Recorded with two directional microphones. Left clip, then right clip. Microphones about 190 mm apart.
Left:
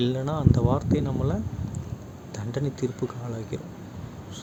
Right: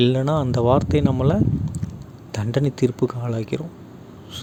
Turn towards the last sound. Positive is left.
turn(degrees=-45)  # may be behind; listen again after turning